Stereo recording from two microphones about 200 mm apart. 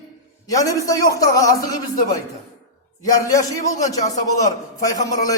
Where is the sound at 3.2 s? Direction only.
15° left (ahead or behind).